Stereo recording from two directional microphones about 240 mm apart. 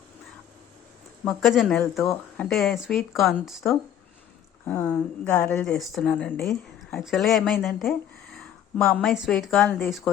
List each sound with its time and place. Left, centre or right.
1.2 s speech: centre